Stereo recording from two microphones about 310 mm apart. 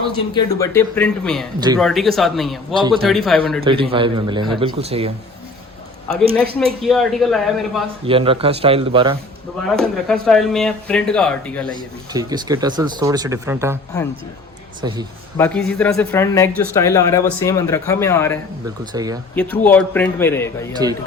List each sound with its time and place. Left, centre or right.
0.3 s speech: centre
1.5 s speech: centre
1.8 s speech: centre
3.6 s speech: centre
6.3 s speech: centre
8.0 s speech: centre
9.6 s speech: centre
12.1 s speech: centre
14.8 s speech: centre
15.4 s speech: centre
18.9 s speech: centre
19.4 s speech: centre